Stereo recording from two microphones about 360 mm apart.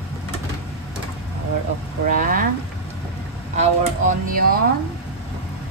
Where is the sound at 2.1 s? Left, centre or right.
Right.